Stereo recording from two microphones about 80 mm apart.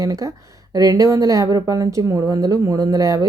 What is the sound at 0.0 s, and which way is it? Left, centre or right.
A woman's voice, right.